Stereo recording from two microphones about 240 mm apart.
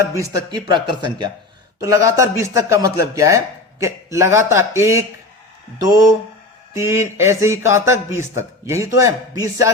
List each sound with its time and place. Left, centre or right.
0.0 s a man's voice: centre
6.7 s a man's voice: centre